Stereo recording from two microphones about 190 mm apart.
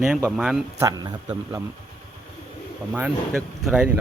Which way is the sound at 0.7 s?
20° right (ahead or behind).